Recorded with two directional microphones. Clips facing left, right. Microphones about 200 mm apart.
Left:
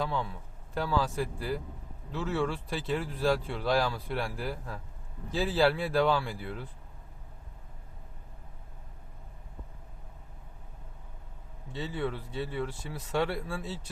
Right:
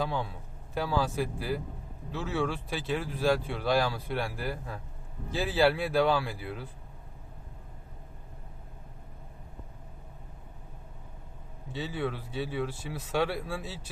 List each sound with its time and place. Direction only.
0.0 s speech: 5° right (ahead or behind)
11.7 s speech: 5° right (ahead or behind)